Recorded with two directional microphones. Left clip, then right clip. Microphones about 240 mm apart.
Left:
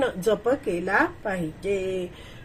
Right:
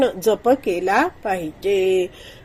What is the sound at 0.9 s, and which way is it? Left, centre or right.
Speech, right.